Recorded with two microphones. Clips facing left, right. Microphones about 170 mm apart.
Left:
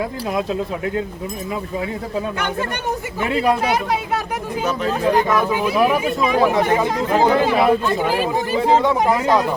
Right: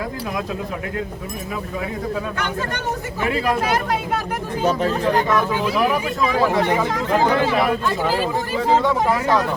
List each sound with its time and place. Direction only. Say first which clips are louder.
3.2 s speech: left 2 dB; 15° left (ahead or behind)
5.3 s speech: left 1 dB; 10° left (ahead or behind)